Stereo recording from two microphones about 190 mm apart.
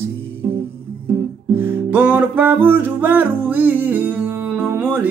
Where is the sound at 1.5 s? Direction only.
10° right (ahead or behind).